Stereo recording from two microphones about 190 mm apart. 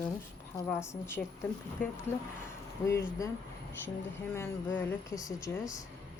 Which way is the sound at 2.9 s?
15° left (ahead or behind).